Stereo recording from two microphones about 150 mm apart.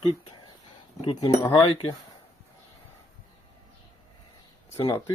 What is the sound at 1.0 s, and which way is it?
Speech, 35° left (ahead or behind).